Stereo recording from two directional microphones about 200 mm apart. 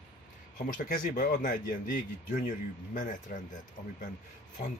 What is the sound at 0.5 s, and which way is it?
Speech, 45° left (ahead or behind).